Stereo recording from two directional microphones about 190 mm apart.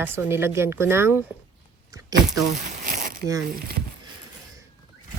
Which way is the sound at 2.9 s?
45° right (ahead or behind).